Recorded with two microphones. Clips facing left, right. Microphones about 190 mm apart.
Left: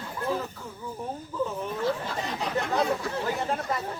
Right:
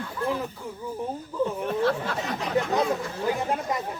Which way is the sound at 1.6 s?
70° right (ahead or behind).